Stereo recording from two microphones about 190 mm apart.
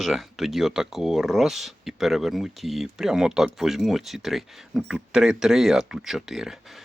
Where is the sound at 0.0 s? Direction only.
Centre (ahead or behind).